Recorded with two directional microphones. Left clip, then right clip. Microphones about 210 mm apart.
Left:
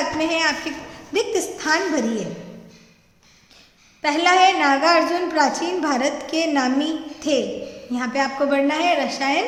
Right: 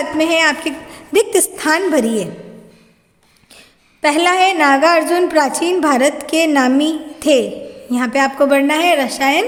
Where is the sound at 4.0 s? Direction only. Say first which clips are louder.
Right 3 dB; 45° right (ahead or behind).